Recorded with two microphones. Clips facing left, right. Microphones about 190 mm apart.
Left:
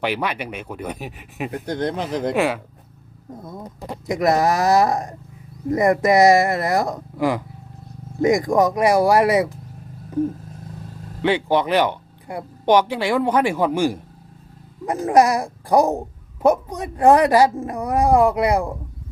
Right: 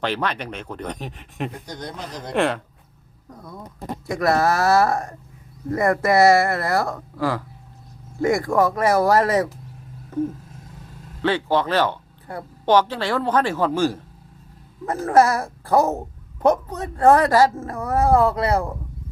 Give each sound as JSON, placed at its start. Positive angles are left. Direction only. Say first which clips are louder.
{"t": 0.0, "sound": "speech", "louder": "left 1 dB", "side_deg": 10}
{"t": 1.5, "sound": "speech", "louder": "left 9 dB", "side_deg": 60}
{"t": 2.3, "sound": "speech", "louder": "right 1 dB", "side_deg": 5}
{"t": 3.2, "sound": "speech", "louder": "left 4 dB", "side_deg": 25}
{"t": 11.2, "sound": "speech", "louder": "left 2 dB", "side_deg": 15}